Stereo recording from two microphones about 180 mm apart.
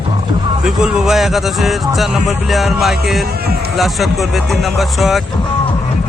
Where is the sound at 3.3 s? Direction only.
60° right (ahead or behind).